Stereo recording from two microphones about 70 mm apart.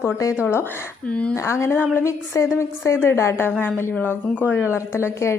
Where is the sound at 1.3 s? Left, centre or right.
Left.